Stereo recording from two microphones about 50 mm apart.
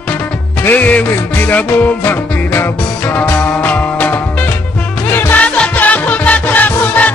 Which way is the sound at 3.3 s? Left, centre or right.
Left.